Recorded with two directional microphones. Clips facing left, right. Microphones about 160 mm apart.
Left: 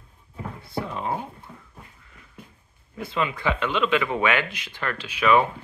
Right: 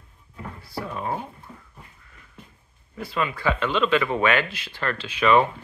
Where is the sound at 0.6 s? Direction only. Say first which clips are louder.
Left 1 dB; 20° left (ahead or behind).